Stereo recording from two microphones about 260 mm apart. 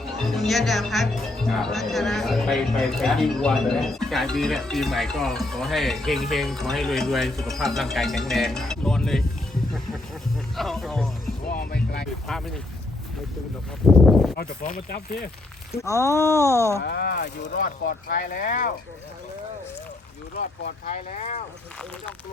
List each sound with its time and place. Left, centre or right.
0.3 s speech: centre
10.6 s speech: centre
11.4 s music: left
12.3 s speech: centre
13.8 s speech: centre
14.3 s speech: left
15.8 s speech: centre
16.8 s speech: left
20.3 s speech: left